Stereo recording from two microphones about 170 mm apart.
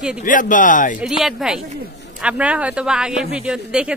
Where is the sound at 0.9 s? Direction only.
5° right (ahead or behind).